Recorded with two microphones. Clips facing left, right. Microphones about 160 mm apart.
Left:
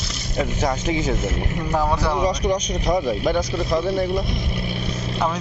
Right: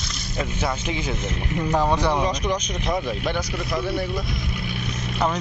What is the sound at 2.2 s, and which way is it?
Speech, 40° left (ahead or behind).